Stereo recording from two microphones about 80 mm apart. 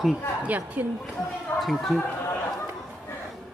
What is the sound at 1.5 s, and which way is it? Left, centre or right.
Speech, centre.